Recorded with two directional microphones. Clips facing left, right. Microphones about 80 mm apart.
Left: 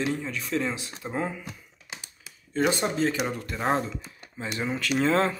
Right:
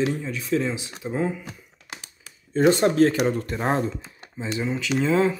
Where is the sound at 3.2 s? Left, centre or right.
Right.